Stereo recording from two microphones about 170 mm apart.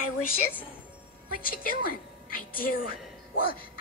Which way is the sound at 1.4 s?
55° left (ahead or behind).